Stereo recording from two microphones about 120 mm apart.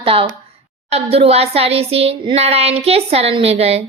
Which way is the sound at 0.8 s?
60° right (ahead or behind).